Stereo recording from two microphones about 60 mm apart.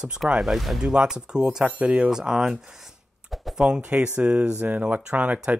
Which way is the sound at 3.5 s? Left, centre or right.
Centre.